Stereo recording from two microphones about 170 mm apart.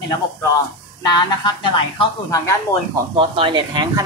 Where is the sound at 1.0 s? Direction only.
25° left (ahead or behind).